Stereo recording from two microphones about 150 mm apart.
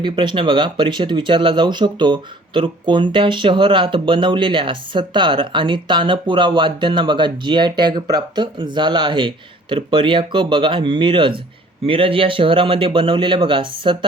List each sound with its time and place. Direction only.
0.0 s speech: 30° right (ahead or behind)